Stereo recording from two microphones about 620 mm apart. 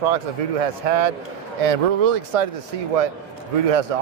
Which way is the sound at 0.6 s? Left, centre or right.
Right.